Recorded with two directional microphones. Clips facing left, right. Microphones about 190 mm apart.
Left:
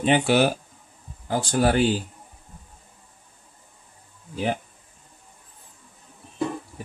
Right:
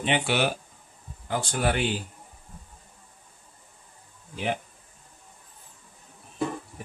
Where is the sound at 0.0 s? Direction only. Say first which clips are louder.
Left 6 dB; 40° left (ahead or behind).